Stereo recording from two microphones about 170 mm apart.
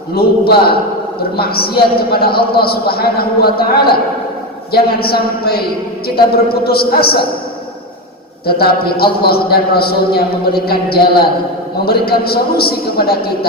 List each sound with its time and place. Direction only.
0.1 s a man's voice: 65° left (ahead or behind)
8.4 s a man's voice: 65° left (ahead or behind)